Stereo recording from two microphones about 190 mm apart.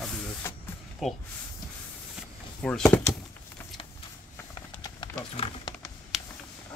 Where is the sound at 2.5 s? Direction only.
5° left (ahead or behind).